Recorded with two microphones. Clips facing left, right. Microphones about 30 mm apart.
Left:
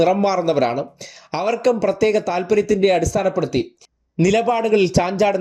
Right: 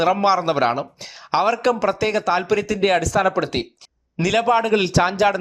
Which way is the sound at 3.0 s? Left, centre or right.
Right.